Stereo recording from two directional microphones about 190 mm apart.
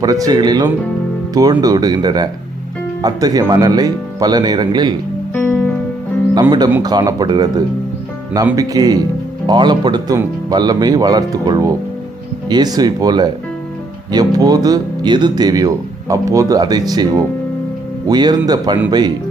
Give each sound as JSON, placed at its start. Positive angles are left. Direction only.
{"t": 0.0, "sound": "speech", "side_deg": -20}
{"t": 5.3, "sound": "music", "side_deg": 10}
{"t": 6.8, "sound": "speech", "side_deg": -20}
{"t": 8.5, "sound": "speech", "side_deg": -20}